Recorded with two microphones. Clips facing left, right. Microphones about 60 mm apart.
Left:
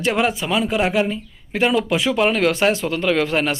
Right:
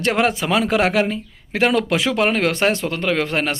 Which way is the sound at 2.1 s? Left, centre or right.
Right.